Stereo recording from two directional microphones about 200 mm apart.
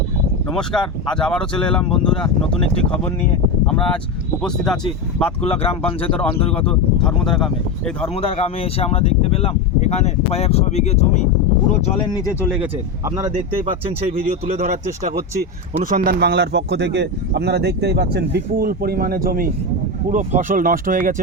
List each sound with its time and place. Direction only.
0.5 s speech: 5° left (ahead or behind)
4.4 s speech: 5° left (ahead or behind)
5.4 s speech: 30° left (ahead or behind)
7.0 s speech: 5° left (ahead or behind)
8.1 s speech: 30° left (ahead or behind)
12.0 s speech: 20° left (ahead or behind)
14.3 s speech: 40° right (ahead or behind)